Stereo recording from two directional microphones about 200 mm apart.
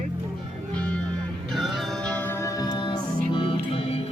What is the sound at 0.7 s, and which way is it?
Music, 5° left (ahead or behind).